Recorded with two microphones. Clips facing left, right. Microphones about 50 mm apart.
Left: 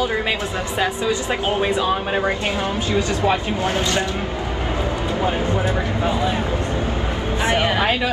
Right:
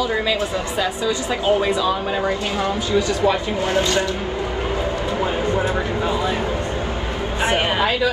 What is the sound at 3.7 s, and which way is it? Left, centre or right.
Speech, left.